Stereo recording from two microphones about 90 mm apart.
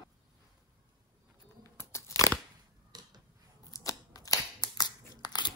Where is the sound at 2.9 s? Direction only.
50° right (ahead or behind).